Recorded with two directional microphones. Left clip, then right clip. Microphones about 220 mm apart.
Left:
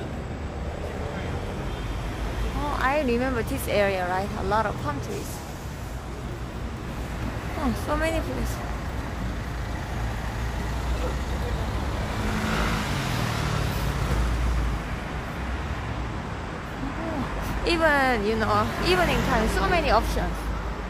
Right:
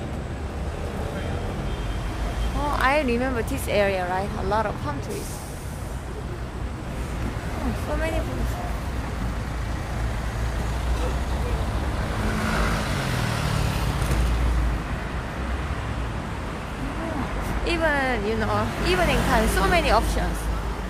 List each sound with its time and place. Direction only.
2.7 s speech: centre (ahead or behind)
17.6 s speech: 20° left (ahead or behind)
19.0 s speech: centre (ahead or behind)